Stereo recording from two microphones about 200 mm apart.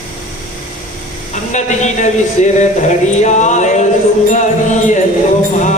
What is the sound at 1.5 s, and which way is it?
Speech, 35° left (ahead or behind).